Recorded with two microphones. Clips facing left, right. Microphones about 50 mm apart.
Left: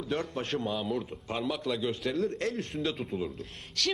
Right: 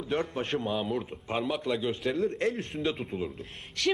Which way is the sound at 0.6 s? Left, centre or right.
Centre.